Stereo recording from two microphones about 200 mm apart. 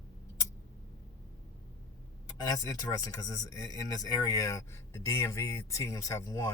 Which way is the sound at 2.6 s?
15° left (ahead or behind).